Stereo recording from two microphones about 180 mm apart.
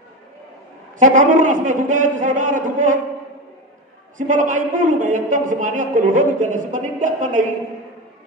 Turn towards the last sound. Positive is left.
turn(degrees=-45)  # may be behind; listen again after turning